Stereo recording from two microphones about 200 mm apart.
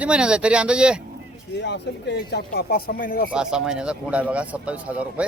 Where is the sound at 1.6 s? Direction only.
60° left (ahead or behind).